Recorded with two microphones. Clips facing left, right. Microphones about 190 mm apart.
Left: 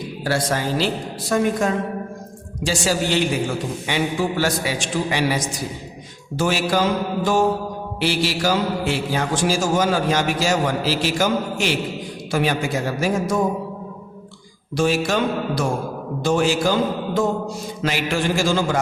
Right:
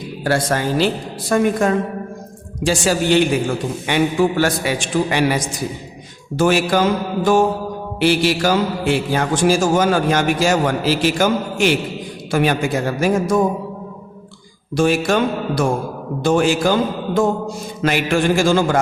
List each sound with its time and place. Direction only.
0.3 s a man's voice: 55° right (ahead or behind)
7.9 s a man's voice: 55° right (ahead or behind)
14.8 s a woman's voice: 55° right (ahead or behind)
17.8 s a woman's voice: 55° right (ahead or behind)